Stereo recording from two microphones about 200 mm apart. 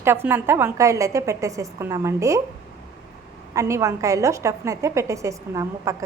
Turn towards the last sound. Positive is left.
turn(degrees=-15)  # may be behind; listen again after turning